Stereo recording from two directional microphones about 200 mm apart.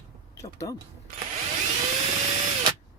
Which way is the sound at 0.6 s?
15° left (ahead or behind).